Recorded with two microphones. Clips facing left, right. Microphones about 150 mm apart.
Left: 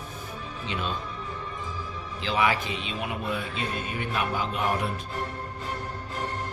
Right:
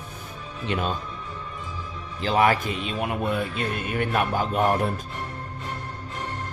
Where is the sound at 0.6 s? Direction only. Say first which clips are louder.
Right 6 dB; 55° right (ahead or behind).